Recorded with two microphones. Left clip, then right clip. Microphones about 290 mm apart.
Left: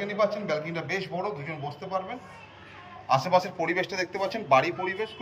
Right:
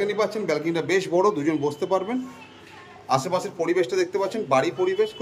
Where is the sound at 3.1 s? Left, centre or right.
Centre.